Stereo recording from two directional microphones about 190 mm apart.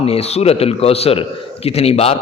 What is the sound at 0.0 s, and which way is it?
A man's voice, 30° left (ahead or behind).